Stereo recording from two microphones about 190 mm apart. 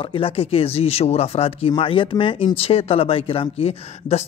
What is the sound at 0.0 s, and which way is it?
Speech, 30° left (ahead or behind).